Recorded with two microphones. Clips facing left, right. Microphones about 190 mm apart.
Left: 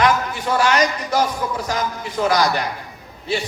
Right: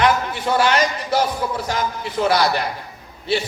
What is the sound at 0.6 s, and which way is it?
Speech, 30° right (ahead or behind).